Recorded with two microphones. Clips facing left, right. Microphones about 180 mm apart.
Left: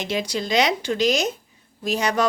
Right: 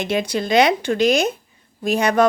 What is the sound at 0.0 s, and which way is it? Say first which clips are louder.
A woman's voice: right 4 dB; 55° right (ahead or behind).